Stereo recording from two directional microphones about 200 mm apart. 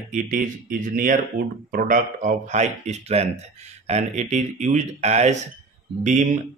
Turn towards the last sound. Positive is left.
turn(degrees=-35)  # may be behind; listen again after turning